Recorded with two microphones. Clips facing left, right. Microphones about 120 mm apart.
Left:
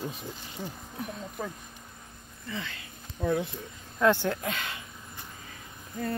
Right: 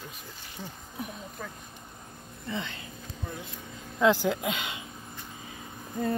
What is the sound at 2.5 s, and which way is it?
Speech, 25° right (ahead or behind).